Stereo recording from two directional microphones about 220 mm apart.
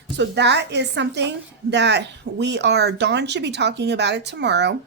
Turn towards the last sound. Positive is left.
turn(degrees=-50)  # may be behind; listen again after turning